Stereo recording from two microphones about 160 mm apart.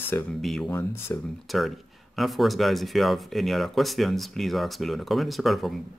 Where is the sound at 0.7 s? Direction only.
15° left (ahead or behind).